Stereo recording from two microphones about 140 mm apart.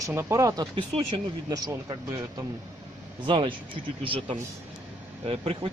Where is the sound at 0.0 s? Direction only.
20° right (ahead or behind).